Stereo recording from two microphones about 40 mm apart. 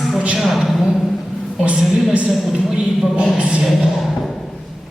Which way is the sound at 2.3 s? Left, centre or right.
Centre.